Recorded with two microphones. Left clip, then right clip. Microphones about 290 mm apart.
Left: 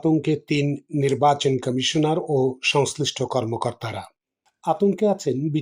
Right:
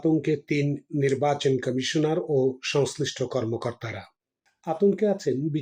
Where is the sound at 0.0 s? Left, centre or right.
Centre.